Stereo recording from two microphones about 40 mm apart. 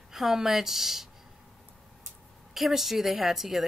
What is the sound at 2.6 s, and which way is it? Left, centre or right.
A woman's voice, centre.